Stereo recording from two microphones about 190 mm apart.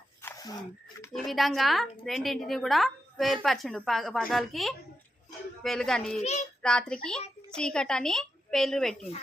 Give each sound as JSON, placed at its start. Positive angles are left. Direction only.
{"t": 0.2, "sound": "a sound", "side_deg": 15}
{"t": 1.1, "sound": "a woman's voice", "side_deg": 0}
{"t": 6.1, "sound": "a child's voice", "side_deg": 35}
{"t": 6.6, "sound": "a woman's voice", "side_deg": 5}